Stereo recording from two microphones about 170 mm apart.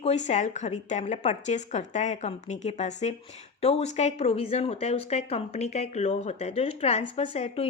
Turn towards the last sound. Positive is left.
turn(degrees=35)  # may be behind; listen again after turning